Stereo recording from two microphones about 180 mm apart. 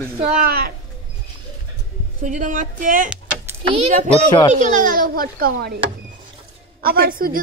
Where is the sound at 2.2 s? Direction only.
45° right (ahead or behind).